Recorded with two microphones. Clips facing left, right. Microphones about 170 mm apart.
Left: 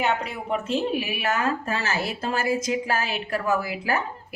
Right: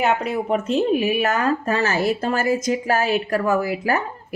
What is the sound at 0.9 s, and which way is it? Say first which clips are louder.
A woman's voice: right 6 dB; 40° right (ahead or behind).